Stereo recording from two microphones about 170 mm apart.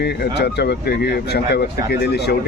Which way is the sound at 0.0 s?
75° left (ahead or behind).